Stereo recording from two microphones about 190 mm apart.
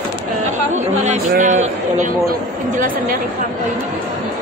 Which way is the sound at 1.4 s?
40° right (ahead or behind).